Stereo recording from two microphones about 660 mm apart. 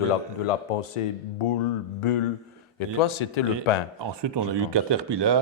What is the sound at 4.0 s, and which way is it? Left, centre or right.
Speech, right.